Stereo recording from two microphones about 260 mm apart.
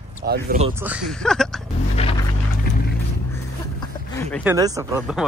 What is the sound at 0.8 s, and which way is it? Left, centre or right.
Speech, centre.